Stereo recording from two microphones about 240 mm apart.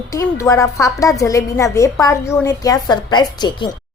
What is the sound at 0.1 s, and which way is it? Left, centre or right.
A woman's voice, centre.